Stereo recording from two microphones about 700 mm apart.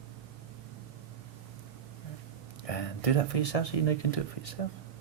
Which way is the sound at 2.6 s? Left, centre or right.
Left.